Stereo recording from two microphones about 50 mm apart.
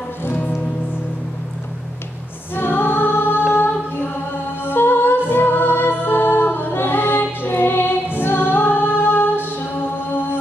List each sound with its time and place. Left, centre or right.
0.2 s music: left
2.5 s choir: left
4.6 s music: left